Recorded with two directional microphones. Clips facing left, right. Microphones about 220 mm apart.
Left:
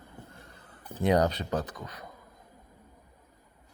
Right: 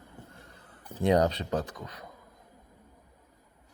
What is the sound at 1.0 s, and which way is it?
Speech, 25° right (ahead or behind).